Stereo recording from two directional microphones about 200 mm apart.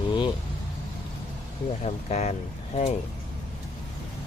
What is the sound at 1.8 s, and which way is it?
Speech, 35° left (ahead or behind).